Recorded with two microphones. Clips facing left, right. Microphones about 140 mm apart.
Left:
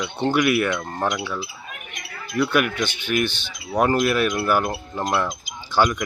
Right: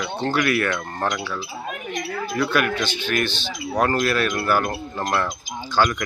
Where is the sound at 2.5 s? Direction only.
15° left (ahead or behind).